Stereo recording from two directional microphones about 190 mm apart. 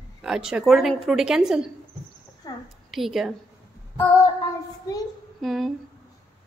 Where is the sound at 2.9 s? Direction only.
Centre (ahead or behind).